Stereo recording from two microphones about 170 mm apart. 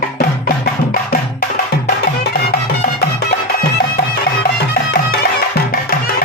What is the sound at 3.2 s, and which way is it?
Music, 65° left (ahead or behind).